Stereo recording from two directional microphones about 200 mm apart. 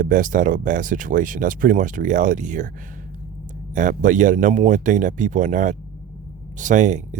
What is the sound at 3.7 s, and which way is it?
Speech, 40° right (ahead or behind).